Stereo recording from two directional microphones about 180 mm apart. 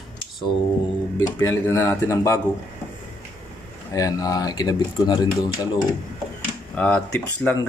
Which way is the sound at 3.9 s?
20° left (ahead or behind).